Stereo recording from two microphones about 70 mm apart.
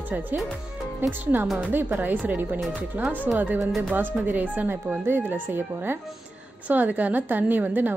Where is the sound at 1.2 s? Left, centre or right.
Right.